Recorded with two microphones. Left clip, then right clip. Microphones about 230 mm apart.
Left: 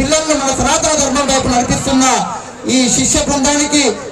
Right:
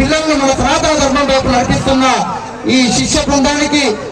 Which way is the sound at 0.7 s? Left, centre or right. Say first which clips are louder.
Right 2 dB; left.